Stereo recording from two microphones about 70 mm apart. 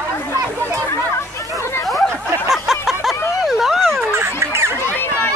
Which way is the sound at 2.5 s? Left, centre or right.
Centre.